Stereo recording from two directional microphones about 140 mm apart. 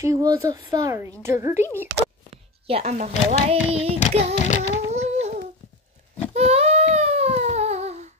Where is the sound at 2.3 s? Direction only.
45° right (ahead or behind).